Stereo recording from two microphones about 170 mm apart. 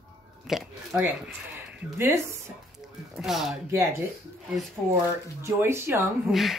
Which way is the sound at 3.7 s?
15° right (ahead or behind).